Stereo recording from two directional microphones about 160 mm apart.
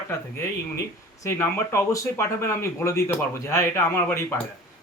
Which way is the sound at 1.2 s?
15° left (ahead or behind).